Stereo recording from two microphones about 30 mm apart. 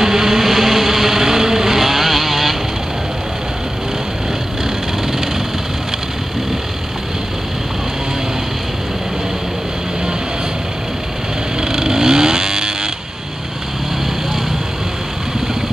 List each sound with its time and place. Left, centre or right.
0.0 s vehicle: centre
11.6 s vehicle: centre